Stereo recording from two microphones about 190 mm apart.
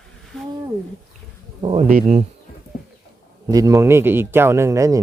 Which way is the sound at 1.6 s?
30° right (ahead or behind).